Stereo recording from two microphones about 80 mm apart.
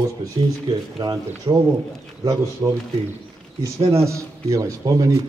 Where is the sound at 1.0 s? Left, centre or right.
Right.